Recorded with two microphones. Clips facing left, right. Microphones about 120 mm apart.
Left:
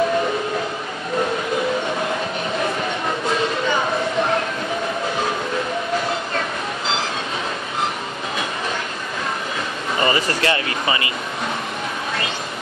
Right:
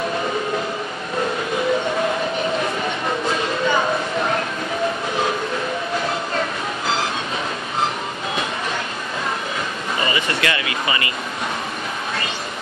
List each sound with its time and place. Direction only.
10.0 s speech: 35° left (ahead or behind)